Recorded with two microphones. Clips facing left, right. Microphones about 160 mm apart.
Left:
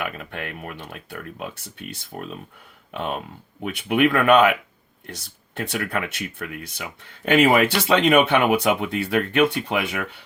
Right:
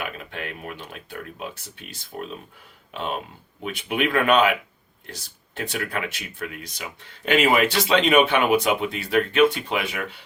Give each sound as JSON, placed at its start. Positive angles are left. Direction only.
{"t": 0.0, "sound": "speech", "side_deg": 55}